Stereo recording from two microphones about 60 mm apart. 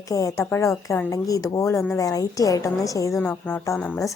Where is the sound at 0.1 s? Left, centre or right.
Left.